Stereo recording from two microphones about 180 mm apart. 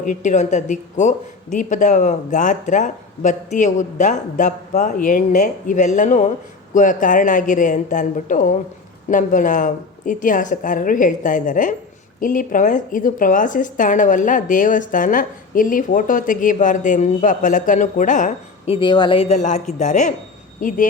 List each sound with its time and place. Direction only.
0.0 s speech: 45° left (ahead or behind)